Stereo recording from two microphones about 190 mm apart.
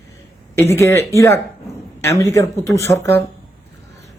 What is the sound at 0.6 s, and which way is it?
Speech, 15° left (ahead or behind).